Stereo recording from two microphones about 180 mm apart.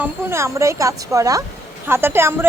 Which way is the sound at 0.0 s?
15° right (ahead or behind).